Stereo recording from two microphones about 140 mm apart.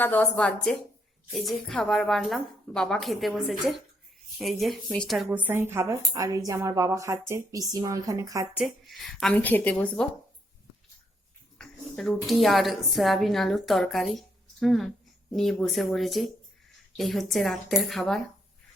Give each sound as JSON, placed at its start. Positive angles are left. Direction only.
{"t": 0.0, "sound": "a woman's voice", "side_deg": 10}
{"t": 8.5, "sound": "a woman's voice", "side_deg": 0}
{"t": 9.3, "sound": "a woman's voice", "side_deg": 10}
{"t": 11.5, "sound": "a woman's voice", "side_deg": 5}